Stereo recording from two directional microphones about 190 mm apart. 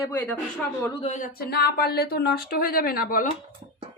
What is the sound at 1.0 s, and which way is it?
Speech, 40° left (ahead or behind).